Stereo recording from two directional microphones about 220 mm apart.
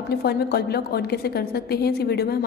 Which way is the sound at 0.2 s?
45° left (ahead or behind).